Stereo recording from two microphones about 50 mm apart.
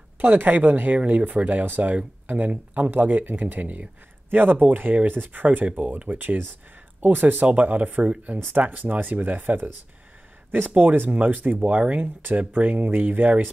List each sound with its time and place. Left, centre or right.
0.2 s speech: right